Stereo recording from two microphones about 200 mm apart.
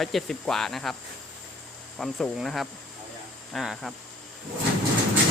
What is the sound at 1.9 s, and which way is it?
Speech, centre (ahead or behind).